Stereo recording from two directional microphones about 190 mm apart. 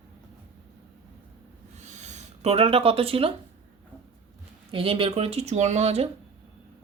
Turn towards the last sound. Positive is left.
turn(degrees=-35)  # may be behind; listen again after turning